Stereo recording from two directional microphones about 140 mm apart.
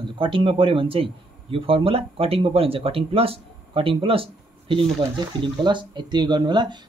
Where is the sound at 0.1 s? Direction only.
40° right (ahead or behind).